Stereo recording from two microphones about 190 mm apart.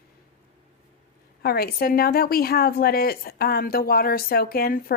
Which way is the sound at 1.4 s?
55° left (ahead or behind).